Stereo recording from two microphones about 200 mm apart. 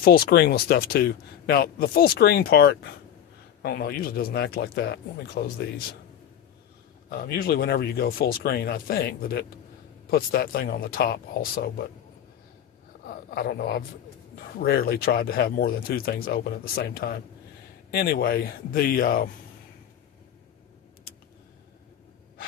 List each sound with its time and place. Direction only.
0.0 s speech: 50° left (ahead or behind)
7.1 s speech: 50° left (ahead or behind)
13.3 s speech: 50° left (ahead or behind)